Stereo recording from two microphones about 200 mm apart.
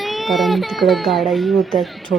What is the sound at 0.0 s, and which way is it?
Speech, centre (ahead or behind).